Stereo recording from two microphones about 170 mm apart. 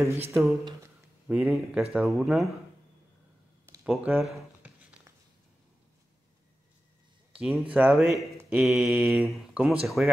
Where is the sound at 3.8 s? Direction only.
5° right (ahead or behind).